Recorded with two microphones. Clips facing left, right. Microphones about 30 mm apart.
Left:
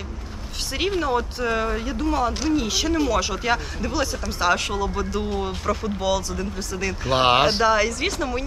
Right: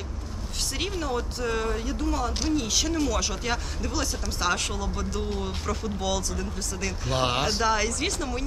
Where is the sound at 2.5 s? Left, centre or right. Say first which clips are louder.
Left 4 dB; centre.